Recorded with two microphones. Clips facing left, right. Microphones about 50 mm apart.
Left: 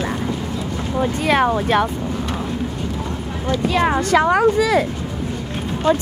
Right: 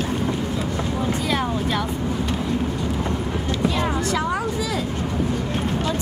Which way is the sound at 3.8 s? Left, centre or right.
Left.